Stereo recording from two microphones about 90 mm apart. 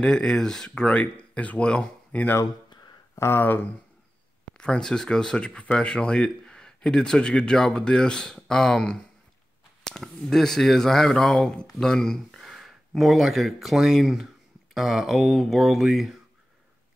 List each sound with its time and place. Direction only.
0.0 s speech: 10° left (ahead or behind)
3.2 s speech: 25° left (ahead or behind)
4.6 s speech: 5° left (ahead or behind)